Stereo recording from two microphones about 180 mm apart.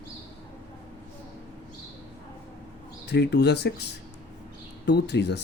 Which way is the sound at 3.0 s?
65° left (ahead or behind).